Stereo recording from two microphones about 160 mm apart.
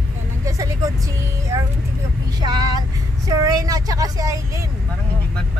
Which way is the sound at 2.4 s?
25° right (ahead or behind).